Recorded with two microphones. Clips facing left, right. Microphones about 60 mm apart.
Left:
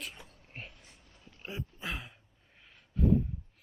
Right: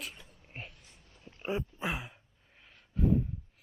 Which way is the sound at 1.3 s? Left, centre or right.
Right.